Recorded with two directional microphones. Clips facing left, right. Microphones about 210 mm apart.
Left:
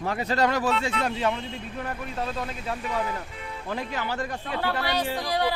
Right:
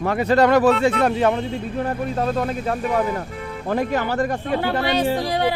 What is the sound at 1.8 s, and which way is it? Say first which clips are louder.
Speech: right 9 dB; 35° right (ahead or behind).